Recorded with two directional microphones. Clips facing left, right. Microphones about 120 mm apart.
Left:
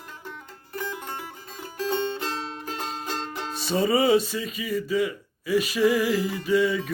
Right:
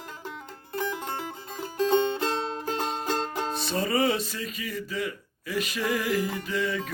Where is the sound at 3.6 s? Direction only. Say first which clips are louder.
Left 5 dB; centre (ahead or behind).